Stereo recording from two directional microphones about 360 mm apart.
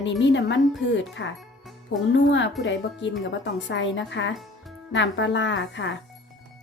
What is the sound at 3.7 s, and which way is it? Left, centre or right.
Speech, left.